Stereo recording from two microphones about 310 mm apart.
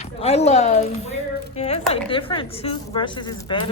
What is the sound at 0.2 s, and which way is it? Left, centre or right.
A woman's voice, centre.